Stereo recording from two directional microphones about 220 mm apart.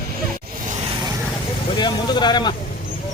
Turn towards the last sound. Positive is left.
turn(degrees=20)  # may be behind; listen again after turning